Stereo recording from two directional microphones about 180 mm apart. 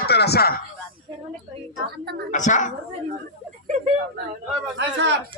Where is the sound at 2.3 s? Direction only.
45° left (ahead or behind).